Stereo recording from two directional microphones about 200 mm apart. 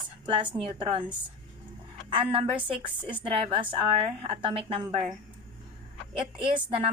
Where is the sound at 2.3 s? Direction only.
25° right (ahead or behind).